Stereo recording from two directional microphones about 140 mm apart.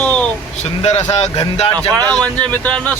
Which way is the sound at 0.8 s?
50° left (ahead or behind).